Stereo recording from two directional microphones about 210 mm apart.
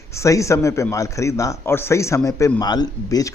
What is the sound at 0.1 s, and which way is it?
A man's voice, 15° left (ahead or behind).